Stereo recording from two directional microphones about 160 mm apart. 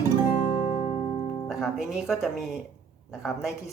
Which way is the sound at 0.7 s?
40° left (ahead or behind).